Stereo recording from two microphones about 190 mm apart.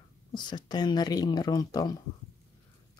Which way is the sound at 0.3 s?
25° left (ahead or behind).